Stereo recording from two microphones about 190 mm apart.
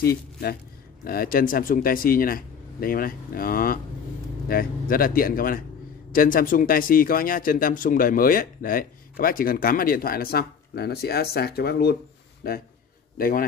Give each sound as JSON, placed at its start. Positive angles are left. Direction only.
{"t": 0.0, "sound": "speech", "side_deg": 55}